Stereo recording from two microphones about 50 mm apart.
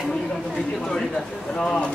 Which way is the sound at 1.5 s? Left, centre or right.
Centre.